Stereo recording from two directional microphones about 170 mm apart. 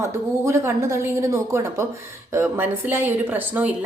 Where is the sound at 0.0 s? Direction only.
15° right (ahead or behind).